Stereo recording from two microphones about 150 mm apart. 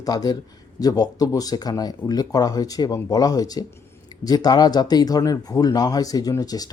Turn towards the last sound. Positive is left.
turn(degrees=25)  # may be behind; listen again after turning